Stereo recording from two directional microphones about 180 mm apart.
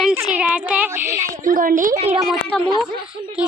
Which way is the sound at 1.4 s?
50° right (ahead or behind).